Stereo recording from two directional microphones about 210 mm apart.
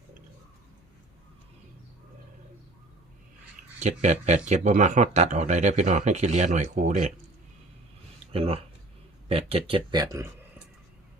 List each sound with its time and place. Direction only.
3.8 s speech: 35° right (ahead or behind)
8.3 s speech: 30° right (ahead or behind)